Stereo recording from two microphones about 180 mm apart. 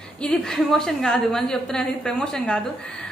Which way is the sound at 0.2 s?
5° left (ahead or behind).